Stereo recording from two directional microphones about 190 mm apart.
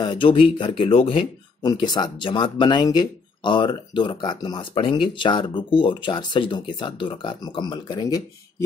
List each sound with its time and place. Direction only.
0.0 s speech: 25° left (ahead or behind)